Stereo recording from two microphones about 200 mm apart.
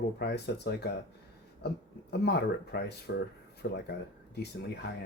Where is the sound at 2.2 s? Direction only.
55° left (ahead or behind).